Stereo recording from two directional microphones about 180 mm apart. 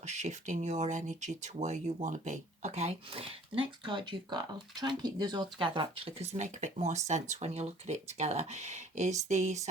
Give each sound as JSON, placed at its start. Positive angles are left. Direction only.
{"t": 0.0, "sound": "speech", "side_deg": -40}